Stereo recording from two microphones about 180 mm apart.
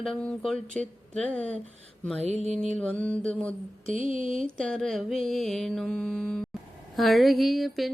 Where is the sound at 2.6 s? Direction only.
5° left (ahead or behind).